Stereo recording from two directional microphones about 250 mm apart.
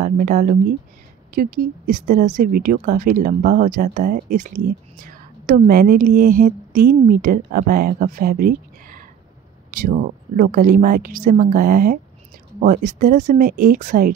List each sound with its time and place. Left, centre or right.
0.0 s speech: right